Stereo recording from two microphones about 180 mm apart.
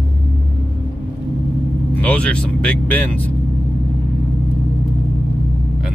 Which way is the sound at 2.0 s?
5° left (ahead or behind).